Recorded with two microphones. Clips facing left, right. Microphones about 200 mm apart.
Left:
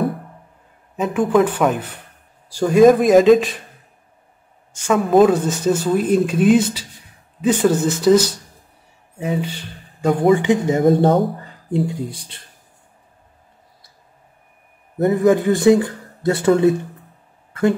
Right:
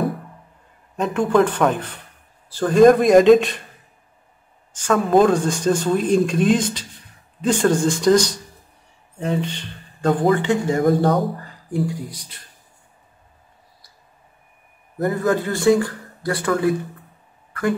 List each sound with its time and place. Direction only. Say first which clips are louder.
0.9 s a man's voice: left 1 dB; 5° left (ahead or behind)
4.8 s a man's voice: left 2 dB; 5° left (ahead or behind); by 12.4 s 30° left (ahead or behind)
15.0 s speech: left 5 dB; 20° left (ahead or behind)